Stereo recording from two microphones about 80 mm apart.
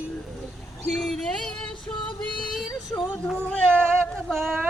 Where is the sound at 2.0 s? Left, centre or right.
Left.